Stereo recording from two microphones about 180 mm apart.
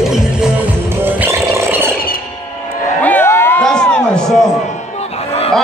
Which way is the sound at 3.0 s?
10° left (ahead or behind).